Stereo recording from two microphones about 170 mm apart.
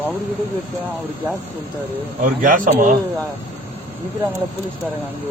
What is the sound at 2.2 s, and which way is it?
Speech, 50° right (ahead or behind).